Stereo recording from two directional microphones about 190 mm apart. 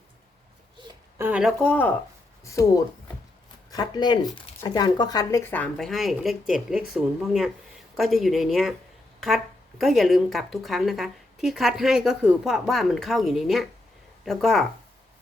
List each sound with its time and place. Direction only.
1.2 s speech: 5° right (ahead or behind)